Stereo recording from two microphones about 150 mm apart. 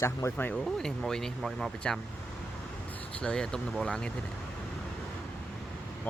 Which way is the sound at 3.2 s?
5° left (ahead or behind).